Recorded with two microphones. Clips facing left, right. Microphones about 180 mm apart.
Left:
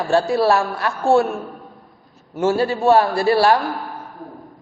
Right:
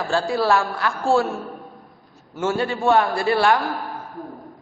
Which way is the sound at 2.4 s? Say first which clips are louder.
Left 4 dB; 30° left (ahead or behind).